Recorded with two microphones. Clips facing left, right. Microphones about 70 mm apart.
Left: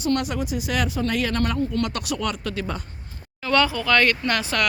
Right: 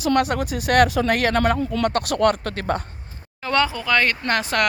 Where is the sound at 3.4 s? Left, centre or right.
Right.